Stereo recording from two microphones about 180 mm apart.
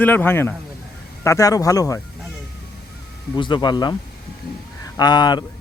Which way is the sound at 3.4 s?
25° left (ahead or behind).